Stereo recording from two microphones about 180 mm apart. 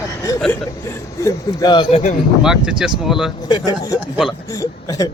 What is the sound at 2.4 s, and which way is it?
Speech, 5° right (ahead or behind).